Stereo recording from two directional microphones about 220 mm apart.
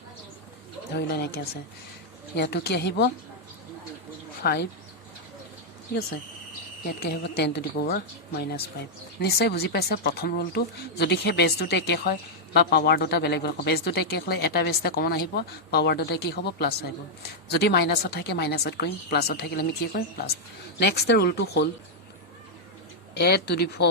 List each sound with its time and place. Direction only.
0.9 s speech: 50° left (ahead or behind)
4.4 s speech: 45° left (ahead or behind)
6.8 s speech: 45° left (ahead or behind)
23.1 s speech: 50° left (ahead or behind)